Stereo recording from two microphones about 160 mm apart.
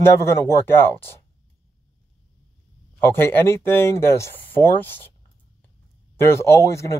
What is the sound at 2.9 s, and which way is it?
Speech, 15° left (ahead or behind).